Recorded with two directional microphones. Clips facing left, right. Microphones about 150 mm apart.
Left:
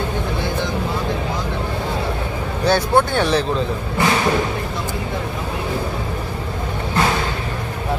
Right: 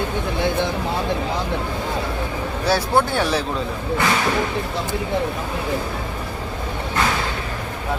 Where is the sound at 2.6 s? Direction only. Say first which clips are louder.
Left 3 dB; 5° right (ahead or behind).